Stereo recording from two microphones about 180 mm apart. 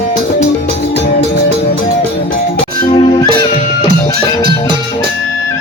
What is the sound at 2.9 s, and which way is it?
Music, 25° left (ahead or behind).